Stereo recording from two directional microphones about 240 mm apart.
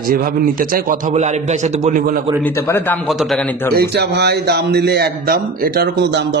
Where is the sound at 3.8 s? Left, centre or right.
Right.